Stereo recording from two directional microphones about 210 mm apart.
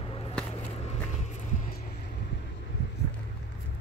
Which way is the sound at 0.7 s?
30° left (ahead or behind).